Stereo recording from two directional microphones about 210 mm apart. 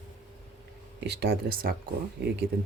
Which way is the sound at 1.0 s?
55° right (ahead or behind).